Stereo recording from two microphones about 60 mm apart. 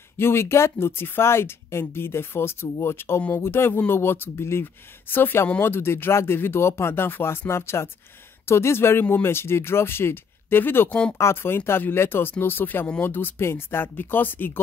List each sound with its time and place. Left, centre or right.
0.2 s speech: left
11.1 s speech: left